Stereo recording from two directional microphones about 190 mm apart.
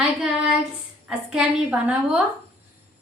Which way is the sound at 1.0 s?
5° right (ahead or behind).